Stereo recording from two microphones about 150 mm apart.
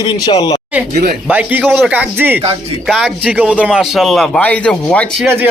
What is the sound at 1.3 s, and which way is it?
Speech, 10° right (ahead or behind).